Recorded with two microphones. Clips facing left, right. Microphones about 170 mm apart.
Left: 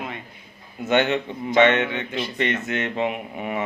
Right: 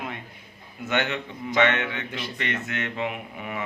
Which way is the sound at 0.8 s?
20° left (ahead or behind).